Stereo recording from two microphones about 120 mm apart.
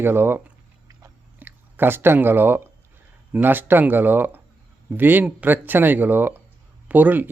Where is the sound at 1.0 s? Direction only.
20° right (ahead or behind).